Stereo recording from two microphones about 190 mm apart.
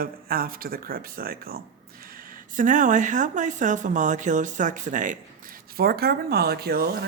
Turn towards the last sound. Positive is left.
turn(degrees=-55)  # may be behind; listen again after turning